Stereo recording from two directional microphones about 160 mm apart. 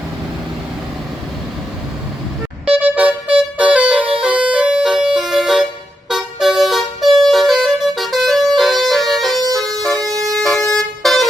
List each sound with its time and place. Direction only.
2.6 s music: 10° right (ahead or behind)
6.1 s vehicle: centre (ahead or behind)
7.3 s music: centre (ahead or behind)
9.5 s bagpipes: centre (ahead or behind)
10.0 s vehicle: 20° right (ahead or behind)
10.3 s vehicle: centre (ahead or behind)